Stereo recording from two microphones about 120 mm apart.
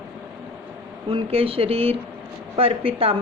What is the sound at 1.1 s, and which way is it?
A woman's voice, 50° right (ahead or behind).